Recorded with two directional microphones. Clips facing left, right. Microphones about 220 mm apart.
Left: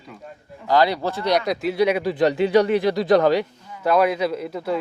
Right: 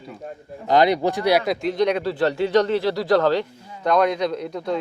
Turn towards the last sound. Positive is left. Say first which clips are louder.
# even
turn(degrees=5)  # may be behind; listen again after turning